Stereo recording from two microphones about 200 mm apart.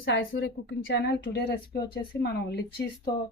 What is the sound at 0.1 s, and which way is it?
A woman's voice, 70° left (ahead or behind).